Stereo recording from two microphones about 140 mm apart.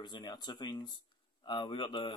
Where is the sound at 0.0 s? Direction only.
30° left (ahead or behind).